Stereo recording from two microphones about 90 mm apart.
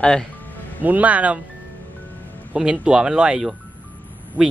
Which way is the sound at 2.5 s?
10° right (ahead or behind).